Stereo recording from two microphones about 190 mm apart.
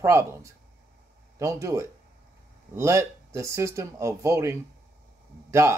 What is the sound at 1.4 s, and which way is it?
Speech, 15° right (ahead or behind).